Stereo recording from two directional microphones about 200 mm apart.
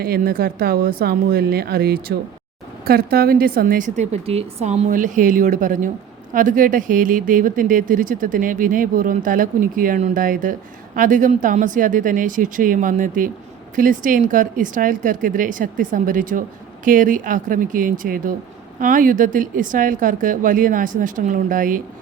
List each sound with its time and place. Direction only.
0.0 s a woman's voice: 50° right (ahead or behind)